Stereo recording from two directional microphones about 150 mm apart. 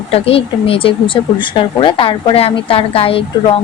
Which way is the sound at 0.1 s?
40° left (ahead or behind).